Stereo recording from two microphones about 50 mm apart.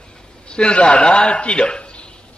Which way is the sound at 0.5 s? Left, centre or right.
Centre.